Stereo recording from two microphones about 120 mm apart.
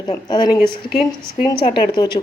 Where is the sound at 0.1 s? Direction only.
35° left (ahead or behind).